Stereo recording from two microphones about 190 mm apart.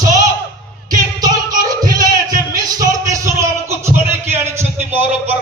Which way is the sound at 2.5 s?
20° right (ahead or behind).